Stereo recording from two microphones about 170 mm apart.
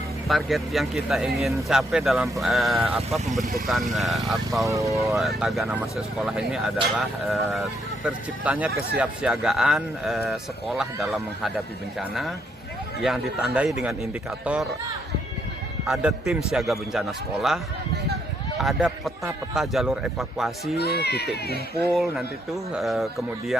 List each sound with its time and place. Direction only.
0.3 s speech: centre (ahead or behind)
4.6 s speech: 20° right (ahead or behind)
4.9 s speech: centre (ahead or behind)
15.9 s speech: 5° right (ahead or behind)
18.6 s speech: centre (ahead or behind)
20.7 s speech: 70° left (ahead or behind)
21.9 s speech: centre (ahead or behind)